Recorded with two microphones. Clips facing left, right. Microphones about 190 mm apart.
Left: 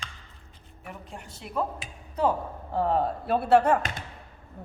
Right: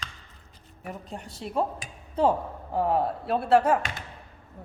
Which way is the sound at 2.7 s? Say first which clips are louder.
Even; 10° right (ahead or behind).